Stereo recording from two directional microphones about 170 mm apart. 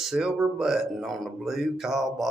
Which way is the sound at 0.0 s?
5° right (ahead or behind).